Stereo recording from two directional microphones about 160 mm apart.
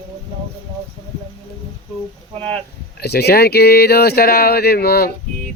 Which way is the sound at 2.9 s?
90° left.